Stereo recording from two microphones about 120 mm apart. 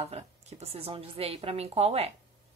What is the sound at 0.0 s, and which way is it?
Speech, 60° right (ahead or behind).